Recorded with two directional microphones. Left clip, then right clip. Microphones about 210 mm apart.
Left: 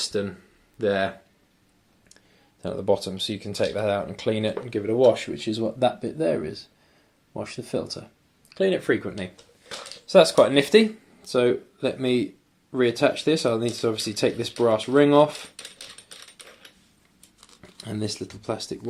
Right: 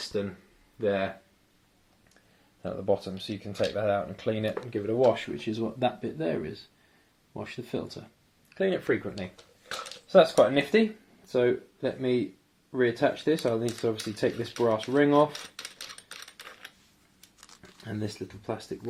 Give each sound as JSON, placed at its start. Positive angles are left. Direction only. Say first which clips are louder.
{"t": 0.1, "sound": "speech", "louder": "left 4 dB", "side_deg": 15}
{"t": 2.6, "sound": "speech", "louder": "left 5 dB", "side_deg": 15}
{"t": 17.4, "sound": "a sound", "louder": "left 2 dB", "side_deg": -5}
{"t": 17.7, "sound": "speech", "louder": "left 5 dB", "side_deg": 10}